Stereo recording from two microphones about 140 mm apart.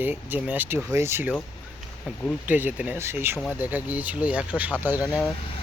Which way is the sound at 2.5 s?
10° right (ahead or behind).